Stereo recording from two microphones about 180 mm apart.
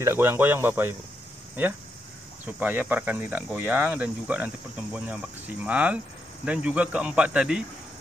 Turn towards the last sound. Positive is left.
turn(degrees=-5)  # may be behind; listen again after turning